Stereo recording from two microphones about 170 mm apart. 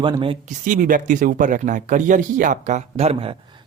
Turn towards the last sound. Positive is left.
turn(degrees=-35)  # may be behind; listen again after turning